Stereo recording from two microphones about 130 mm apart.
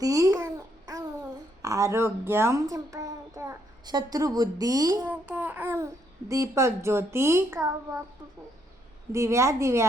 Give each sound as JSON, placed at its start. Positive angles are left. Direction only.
{"t": 0.0, "sound": "babbling", "side_deg": -25}
{"t": 1.6, "sound": "a child's voice", "side_deg": -25}
{"t": 5.0, "sound": "a child's voice", "side_deg": -10}
{"t": 9.1, "sound": "a child's voice", "side_deg": -20}